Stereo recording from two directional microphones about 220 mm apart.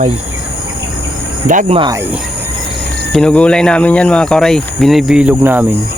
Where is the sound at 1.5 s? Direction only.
30° right (ahead or behind).